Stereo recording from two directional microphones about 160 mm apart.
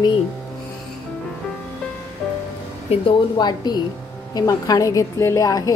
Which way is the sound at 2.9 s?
30° left (ahead or behind).